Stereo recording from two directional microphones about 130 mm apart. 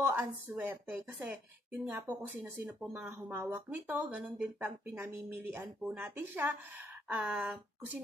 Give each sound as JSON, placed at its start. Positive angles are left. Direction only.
{"t": 0.1, "sound": "speech", "side_deg": -15}